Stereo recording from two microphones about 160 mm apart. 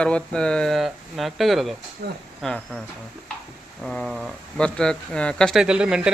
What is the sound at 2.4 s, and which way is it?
Speech, centre (ahead or behind).